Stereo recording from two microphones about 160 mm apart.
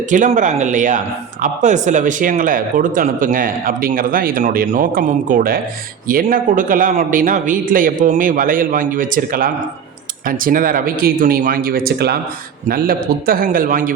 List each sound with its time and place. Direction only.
0.1 s speech: 50° right (ahead or behind); by 12.2 s 85° right
12.6 s speech: 65° right (ahead or behind)